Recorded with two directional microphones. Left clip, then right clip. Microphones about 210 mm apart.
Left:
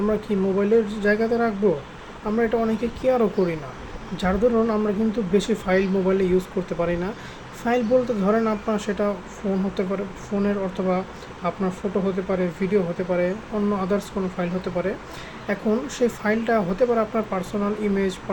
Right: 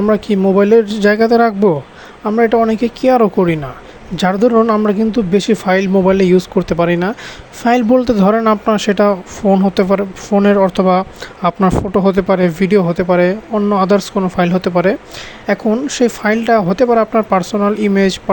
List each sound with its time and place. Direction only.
0.0 s speech: 45° right (ahead or behind)